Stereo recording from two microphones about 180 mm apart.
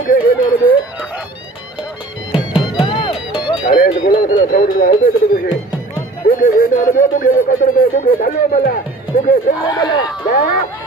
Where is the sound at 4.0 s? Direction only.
50° left (ahead or behind).